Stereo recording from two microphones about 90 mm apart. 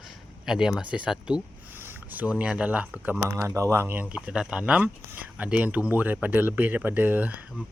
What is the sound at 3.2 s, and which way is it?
Speech, 35° right (ahead or behind).